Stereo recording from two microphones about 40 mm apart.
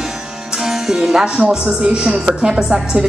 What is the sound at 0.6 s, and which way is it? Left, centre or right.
Speech, centre.